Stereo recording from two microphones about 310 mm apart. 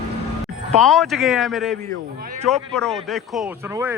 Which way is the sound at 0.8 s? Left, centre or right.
Centre.